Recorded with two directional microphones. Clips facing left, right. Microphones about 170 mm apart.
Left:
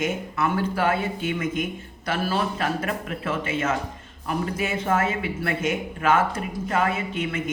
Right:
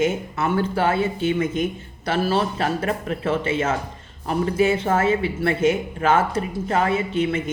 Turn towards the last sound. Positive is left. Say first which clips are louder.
# right 6 dB
turn(degrees=-30)  # may be behind; listen again after turning